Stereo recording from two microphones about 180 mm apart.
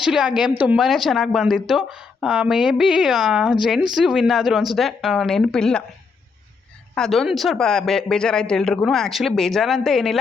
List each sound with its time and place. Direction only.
0.0 s a woman's voice: 5° right (ahead or behind)
6.9 s a woman's voice: centre (ahead or behind)